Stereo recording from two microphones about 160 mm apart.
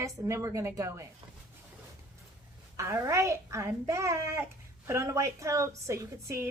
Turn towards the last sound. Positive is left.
turn(degrees=-15)  # may be behind; listen again after turning